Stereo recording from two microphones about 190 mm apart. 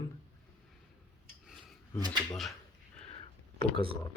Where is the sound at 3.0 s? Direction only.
30° left (ahead or behind).